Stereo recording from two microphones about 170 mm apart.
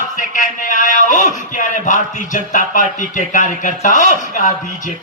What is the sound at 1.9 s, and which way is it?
A man's voice, 50° left (ahead or behind).